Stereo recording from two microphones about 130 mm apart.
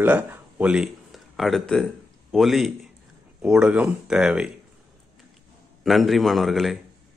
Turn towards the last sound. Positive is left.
turn(degrees=0)  # may be behind; listen again after turning